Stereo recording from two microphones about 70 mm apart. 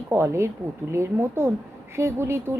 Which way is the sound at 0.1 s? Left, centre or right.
Right.